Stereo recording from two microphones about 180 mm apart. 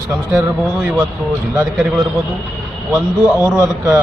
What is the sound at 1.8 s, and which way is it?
Speech, centre (ahead or behind).